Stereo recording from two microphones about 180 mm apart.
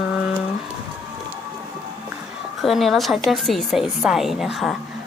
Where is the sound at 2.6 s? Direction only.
Centre (ahead or behind).